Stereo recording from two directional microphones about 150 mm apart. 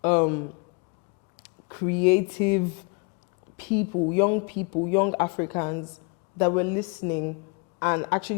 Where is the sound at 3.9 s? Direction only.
25° left (ahead or behind).